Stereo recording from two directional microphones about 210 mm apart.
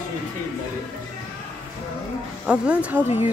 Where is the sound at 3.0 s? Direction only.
30° left (ahead or behind).